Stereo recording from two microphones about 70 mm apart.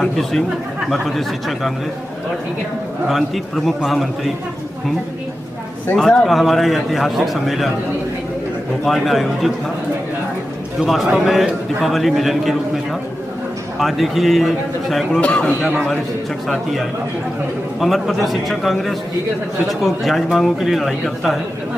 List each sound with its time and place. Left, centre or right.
0.0 s a man's voice: centre
3.1 s a man's voice: centre
5.9 s a man's voice: centre
8.8 s a man's voice: centre
10.8 s a man's voice: centre
13.7 s a man's voice: centre
15.1 s a man's voice: centre
17.7 s a man's voice: centre